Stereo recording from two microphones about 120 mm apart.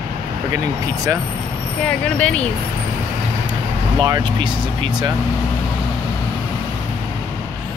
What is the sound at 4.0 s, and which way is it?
Speech, 40° right (ahead or behind).